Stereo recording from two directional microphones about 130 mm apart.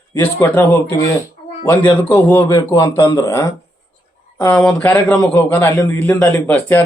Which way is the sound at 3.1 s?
25° left (ahead or behind).